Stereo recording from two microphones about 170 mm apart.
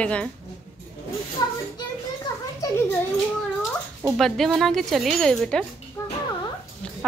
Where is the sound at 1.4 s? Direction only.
25° left (ahead or behind).